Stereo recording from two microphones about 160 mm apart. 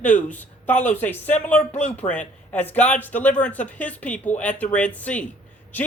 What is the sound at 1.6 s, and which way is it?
Speech, 45° left (ahead or behind).